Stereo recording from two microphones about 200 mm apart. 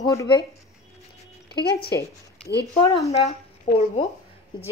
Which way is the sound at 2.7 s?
15° left (ahead or behind).